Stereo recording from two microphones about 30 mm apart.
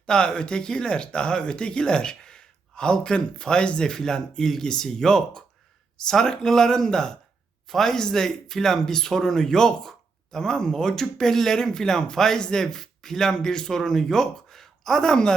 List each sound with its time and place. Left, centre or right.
0.0 s speech: left